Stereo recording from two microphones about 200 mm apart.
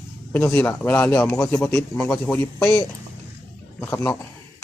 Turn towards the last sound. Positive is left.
turn(degrees=10)  # may be behind; listen again after turning